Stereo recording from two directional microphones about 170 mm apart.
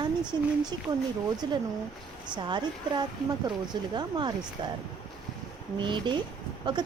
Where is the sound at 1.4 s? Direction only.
25° right (ahead or behind).